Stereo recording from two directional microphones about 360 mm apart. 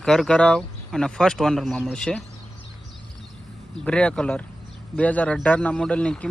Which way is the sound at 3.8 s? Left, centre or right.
Centre.